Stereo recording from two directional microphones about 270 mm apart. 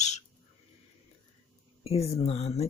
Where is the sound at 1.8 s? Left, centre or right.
Left.